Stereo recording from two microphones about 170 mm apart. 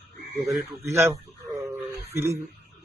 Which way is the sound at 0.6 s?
15° right (ahead or behind).